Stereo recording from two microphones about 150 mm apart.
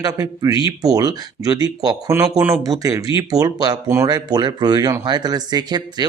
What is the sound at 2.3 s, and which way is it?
Speech, 10° right (ahead or behind).